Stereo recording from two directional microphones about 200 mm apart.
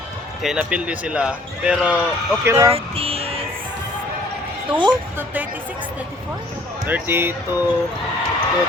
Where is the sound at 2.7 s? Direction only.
30° right (ahead or behind).